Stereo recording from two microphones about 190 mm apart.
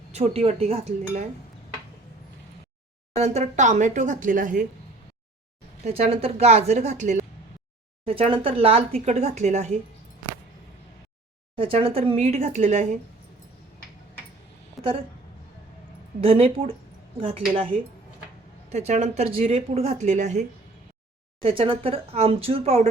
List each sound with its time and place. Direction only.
0.1 s speech: 30° right (ahead or behind)
3.2 s speech: 35° right (ahead or behind)
5.8 s speech: 30° right (ahead or behind)
11.5 s speech: 30° right (ahead or behind)
16.2 s speech: 30° right (ahead or behind)
21.4 s speech: 30° right (ahead or behind)